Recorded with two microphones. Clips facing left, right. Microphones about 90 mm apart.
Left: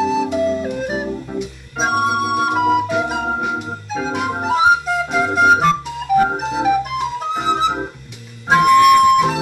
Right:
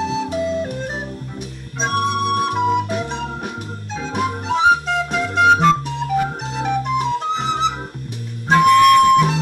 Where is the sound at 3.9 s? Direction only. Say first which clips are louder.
Left 2 dB; 50° left (ahead or behind).